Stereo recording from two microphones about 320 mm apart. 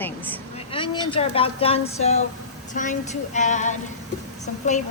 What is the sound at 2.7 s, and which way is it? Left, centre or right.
Child singing, left.